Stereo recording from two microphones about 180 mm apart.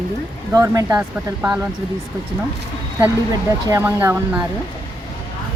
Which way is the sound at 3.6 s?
15° right (ahead or behind).